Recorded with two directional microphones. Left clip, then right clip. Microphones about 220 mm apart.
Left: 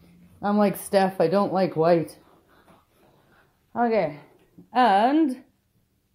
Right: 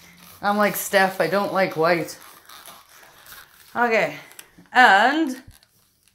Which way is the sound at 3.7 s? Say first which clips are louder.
Right 3 dB; 15° left (ahead or behind).